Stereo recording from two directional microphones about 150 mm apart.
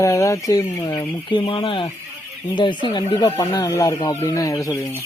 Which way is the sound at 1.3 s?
35° left (ahead or behind).